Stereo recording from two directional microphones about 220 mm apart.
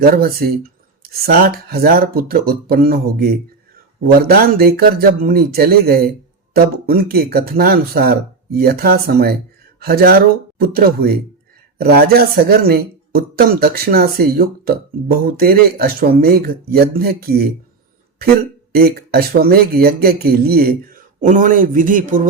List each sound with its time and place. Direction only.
0.0 s speech: 45° right (ahead or behind)